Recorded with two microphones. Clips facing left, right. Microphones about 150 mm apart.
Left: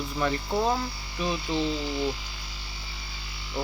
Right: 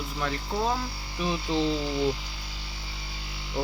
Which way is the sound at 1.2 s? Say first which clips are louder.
Right 1 dB; 20° right (ahead or behind).